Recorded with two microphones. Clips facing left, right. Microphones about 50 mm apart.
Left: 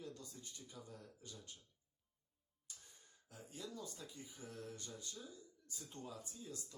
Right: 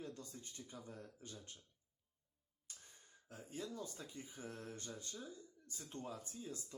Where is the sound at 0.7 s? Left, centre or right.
Right.